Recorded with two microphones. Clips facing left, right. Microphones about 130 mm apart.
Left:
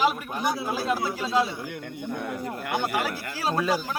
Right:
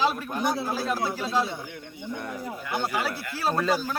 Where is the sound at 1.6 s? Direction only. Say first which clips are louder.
Left 3 dB; 65° left (ahead or behind).